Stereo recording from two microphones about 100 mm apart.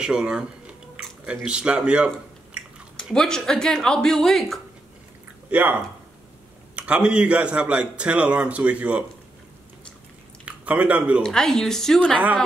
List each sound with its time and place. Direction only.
0.0 s a man's voice: 10° right (ahead or behind)
3.0 s speech: 5° left (ahead or behind)
5.5 s a man's voice: 15° right (ahead or behind)
10.4 s speech: 15° right (ahead or behind)
11.2 s speech: 5° left (ahead or behind)